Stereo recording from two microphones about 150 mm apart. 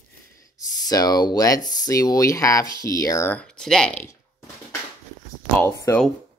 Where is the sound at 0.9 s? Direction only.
25° left (ahead or behind).